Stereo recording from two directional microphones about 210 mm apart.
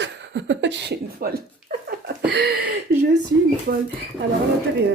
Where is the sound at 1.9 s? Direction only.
50° right (ahead or behind).